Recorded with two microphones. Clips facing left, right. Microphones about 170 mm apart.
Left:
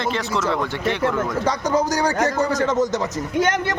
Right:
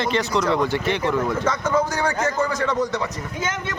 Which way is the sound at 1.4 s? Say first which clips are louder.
Left 1 dB; 35° left (ahead or behind).